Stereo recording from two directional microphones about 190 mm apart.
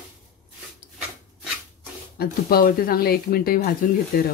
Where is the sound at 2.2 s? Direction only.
50° left (ahead or behind).